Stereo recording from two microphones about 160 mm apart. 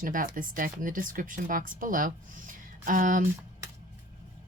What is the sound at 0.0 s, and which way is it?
Speech, 60° right (ahead or behind).